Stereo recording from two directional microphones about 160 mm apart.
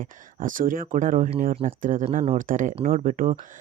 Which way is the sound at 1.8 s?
55° right (ahead or behind).